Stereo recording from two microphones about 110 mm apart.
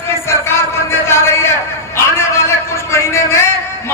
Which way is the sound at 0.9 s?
25° left (ahead or behind).